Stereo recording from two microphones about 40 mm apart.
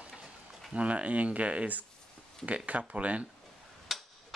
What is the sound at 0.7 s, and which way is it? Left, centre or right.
Speech, right.